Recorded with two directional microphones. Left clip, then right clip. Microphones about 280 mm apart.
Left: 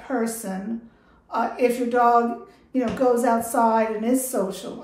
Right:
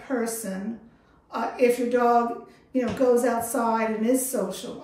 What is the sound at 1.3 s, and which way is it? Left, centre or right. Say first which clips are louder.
A woman's voice: left 1 dB; centre.